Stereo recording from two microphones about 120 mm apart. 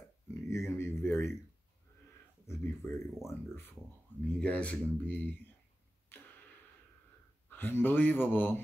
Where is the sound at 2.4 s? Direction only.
20° left (ahead or behind).